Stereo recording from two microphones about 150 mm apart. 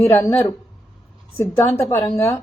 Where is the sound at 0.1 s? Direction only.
15° left (ahead or behind).